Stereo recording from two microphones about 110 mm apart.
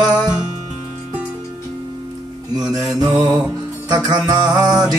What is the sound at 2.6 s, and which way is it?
Mantra, centre (ahead or behind).